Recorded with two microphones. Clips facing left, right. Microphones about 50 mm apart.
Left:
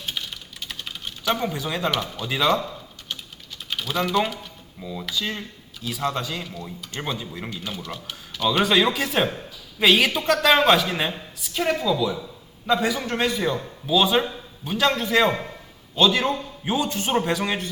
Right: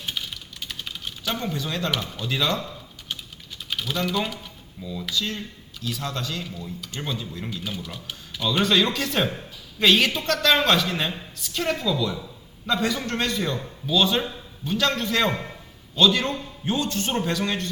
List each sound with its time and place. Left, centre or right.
0.1 s typing: centre
1.3 s a woman's voice: centre
3.7 s speech: centre
4.8 s speech: left
5.0 s a woman's voice: centre